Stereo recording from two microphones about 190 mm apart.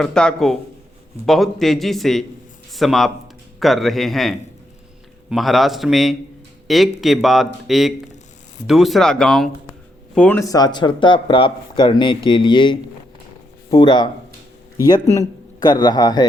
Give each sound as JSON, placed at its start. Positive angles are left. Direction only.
{"t": 0.0, "sound": "a man's voice", "side_deg": 5}